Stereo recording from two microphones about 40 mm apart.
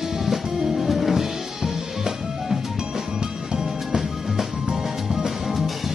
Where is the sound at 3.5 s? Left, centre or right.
Centre.